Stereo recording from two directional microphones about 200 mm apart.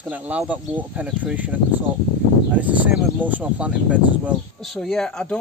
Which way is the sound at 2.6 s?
5° right (ahead or behind).